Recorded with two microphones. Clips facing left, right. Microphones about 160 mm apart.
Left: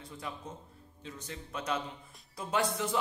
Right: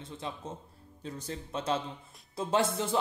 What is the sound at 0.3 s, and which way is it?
A man's voice, 25° right (ahead or behind).